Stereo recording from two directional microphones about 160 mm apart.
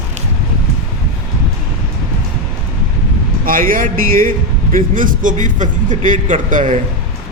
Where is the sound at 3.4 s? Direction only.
60° right (ahead or behind).